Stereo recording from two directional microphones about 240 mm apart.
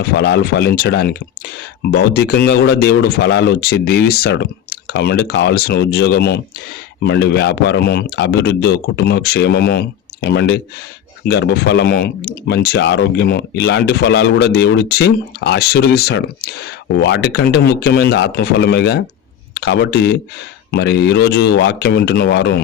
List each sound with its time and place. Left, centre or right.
0.0 s speech: left